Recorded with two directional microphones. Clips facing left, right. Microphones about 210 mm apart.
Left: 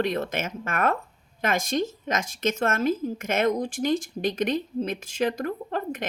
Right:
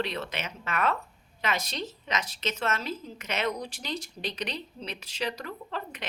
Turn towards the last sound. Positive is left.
turn(degrees=50)  # may be behind; listen again after turning